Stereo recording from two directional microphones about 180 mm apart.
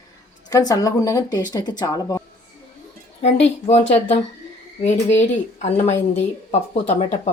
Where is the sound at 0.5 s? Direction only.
20° left (ahead or behind).